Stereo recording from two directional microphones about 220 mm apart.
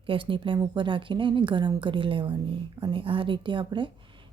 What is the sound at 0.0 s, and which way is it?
Speech, 25° right (ahead or behind).